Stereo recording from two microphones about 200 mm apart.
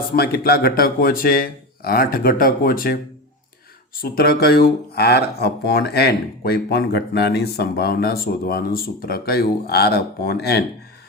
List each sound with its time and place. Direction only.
0.1 s speech: 50° left (ahead or behind)
4.0 s speech: 50° left (ahead or behind)